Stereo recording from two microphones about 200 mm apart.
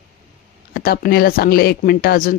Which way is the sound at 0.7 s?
50° left (ahead or behind).